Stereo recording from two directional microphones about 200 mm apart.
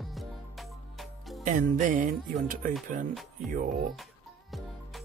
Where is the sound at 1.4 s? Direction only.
40° right (ahead or behind).